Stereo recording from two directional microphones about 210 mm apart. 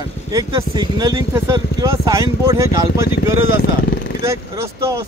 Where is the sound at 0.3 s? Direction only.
20° right (ahead or behind).